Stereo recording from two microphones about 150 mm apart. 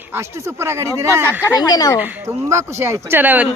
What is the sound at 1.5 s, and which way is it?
Speech, 25° left (ahead or behind).